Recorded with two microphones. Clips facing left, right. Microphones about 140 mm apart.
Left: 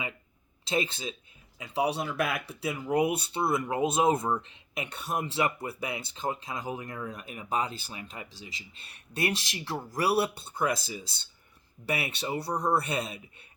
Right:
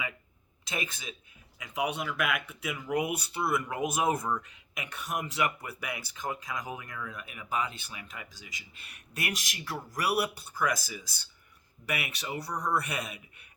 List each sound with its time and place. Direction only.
0.6 s speech: 30° left (ahead or behind)